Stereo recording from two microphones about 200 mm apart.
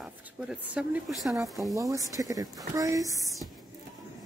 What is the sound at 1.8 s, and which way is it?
Speech, 15° right (ahead or behind).